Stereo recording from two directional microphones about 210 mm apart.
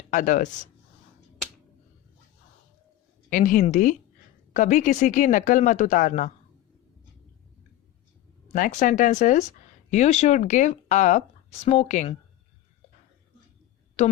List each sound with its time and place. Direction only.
0.1 s speech: 40° left (ahead or behind)
3.2 s speech: 40° left (ahead or behind)
8.5 s speech: 40° left (ahead or behind)
14.0 s speech: 35° left (ahead or behind)